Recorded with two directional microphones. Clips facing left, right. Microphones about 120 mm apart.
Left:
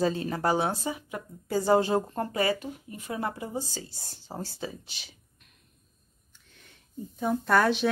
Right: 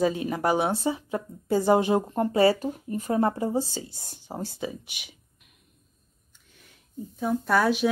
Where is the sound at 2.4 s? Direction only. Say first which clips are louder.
Right 9 dB; 40° right (ahead or behind).